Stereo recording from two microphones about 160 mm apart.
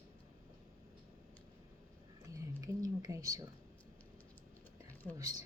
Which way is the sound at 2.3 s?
20° right (ahead or behind).